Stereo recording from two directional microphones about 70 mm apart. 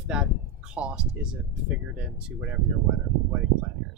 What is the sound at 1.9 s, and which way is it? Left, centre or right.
Speech, centre.